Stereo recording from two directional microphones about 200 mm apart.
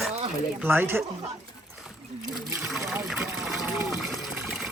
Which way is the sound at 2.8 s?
15° right (ahead or behind).